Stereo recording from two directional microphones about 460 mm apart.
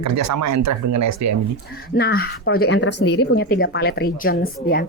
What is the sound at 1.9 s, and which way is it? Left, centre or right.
Speech, centre.